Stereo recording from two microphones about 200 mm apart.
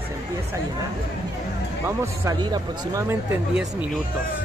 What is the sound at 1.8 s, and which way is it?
A man's voice, 15° right (ahead or behind).